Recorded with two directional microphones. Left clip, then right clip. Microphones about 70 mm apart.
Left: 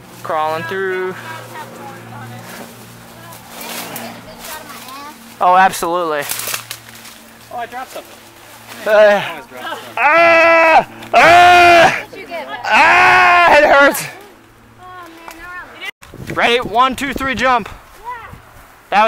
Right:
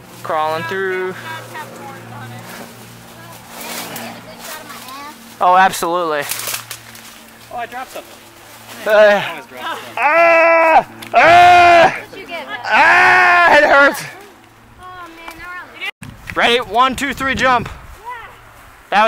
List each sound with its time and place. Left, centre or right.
0.2 s speech: centre
1.9 s vehicle: centre
4.6 s a sound: centre
7.5 s speech: centre
9.6 s speech: right
9.9 s speech: centre
10.7 s speech: left
12.1 s a sound: centre
12.6 s speech: left
15.4 s a sound: right
16.3 s speech: centre